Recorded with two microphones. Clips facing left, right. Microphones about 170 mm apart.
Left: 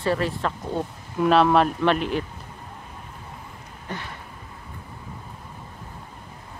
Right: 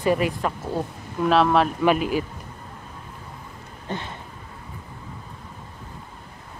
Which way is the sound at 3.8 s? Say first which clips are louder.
Right 3 dB; 25° right (ahead or behind).